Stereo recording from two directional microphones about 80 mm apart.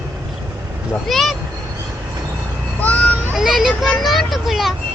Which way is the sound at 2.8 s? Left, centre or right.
Centre.